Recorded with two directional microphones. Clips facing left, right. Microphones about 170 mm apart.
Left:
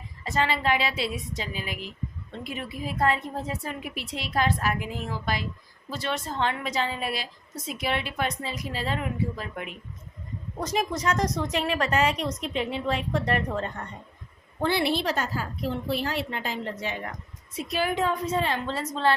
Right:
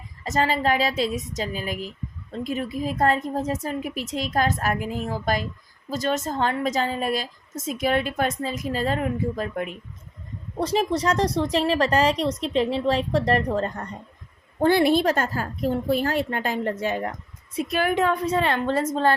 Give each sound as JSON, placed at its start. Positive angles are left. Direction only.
{"t": 0.3, "sound": "a woman's voice", "side_deg": -40}
{"t": 10.6, "sound": "a woman's voice", "side_deg": -30}